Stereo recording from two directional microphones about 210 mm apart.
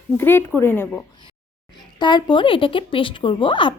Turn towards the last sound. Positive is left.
turn(degrees=25)  # may be behind; listen again after turning